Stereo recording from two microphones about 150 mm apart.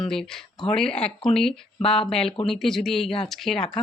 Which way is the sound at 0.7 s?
5° left (ahead or behind).